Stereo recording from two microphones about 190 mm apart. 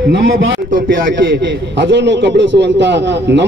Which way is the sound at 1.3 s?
65° right (ahead or behind).